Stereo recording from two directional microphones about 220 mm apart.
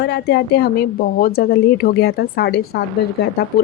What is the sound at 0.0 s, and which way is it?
A woman's voice, 50° left (ahead or behind).